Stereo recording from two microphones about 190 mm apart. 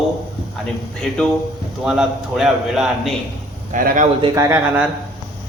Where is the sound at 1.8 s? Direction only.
Centre (ahead or behind).